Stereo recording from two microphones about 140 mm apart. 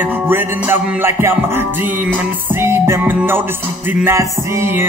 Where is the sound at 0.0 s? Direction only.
15° right (ahead or behind).